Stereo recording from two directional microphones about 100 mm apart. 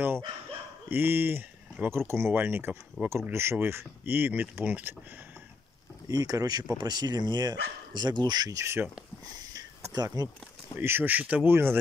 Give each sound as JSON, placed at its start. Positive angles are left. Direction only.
{"t": 0.8, "sound": "speech", "side_deg": -20}
{"t": 6.0, "sound": "speech", "side_deg": -35}
{"t": 9.4, "sound": "a sound", "side_deg": -40}
{"t": 10.8, "sound": "speech", "side_deg": -25}